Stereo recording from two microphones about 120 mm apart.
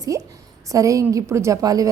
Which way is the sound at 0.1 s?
25° right (ahead or behind).